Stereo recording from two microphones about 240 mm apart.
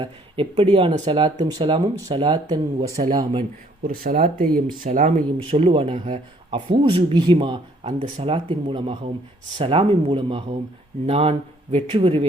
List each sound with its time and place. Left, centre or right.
0.0 s speech: right
3.8 s speech: right